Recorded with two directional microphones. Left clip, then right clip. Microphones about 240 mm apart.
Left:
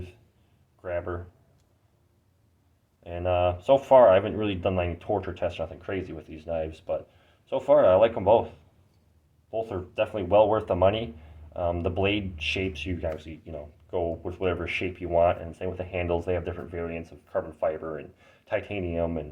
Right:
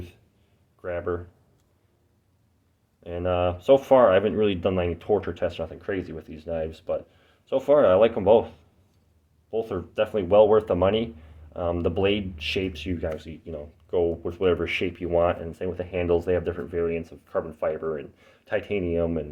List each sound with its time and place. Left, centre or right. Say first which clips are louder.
0.8 s speech: right 3 dB; right
3.0 s speech: even; right